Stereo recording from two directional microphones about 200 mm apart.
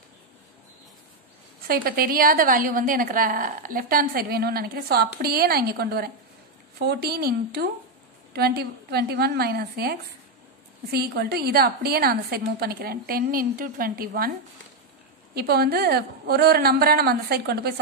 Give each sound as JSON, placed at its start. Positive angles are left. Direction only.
{"t": 1.7, "sound": "a woman's voice", "side_deg": -45}
{"t": 15.3, "sound": "a woman's voice", "side_deg": -50}